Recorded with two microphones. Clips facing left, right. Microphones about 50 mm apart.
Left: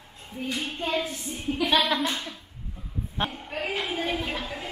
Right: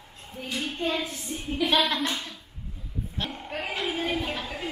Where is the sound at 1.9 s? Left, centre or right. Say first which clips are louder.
Left 2 dB; centre.